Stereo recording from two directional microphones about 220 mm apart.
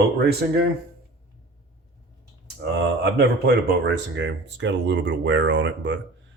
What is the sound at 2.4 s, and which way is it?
Speech, 50° right (ahead or behind).